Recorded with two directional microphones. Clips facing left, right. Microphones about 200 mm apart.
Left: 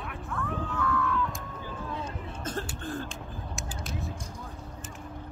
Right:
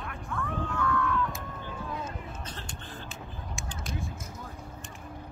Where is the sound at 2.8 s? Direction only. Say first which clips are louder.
Left 9 dB; 45° left (ahead or behind).